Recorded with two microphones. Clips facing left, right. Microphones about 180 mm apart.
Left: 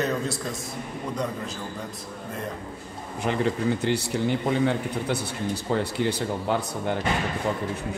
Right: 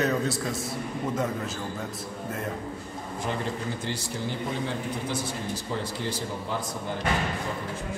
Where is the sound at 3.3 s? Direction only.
75° left (ahead or behind).